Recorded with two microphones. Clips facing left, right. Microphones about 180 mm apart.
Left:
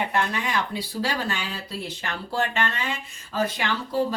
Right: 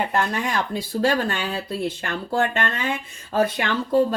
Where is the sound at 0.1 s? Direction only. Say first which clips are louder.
Right 2 dB; 45° right (ahead or behind).